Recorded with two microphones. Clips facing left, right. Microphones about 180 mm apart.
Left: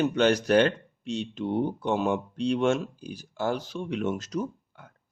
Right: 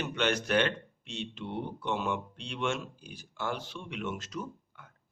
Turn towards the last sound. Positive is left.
turn(degrees=40)  # may be behind; listen again after turning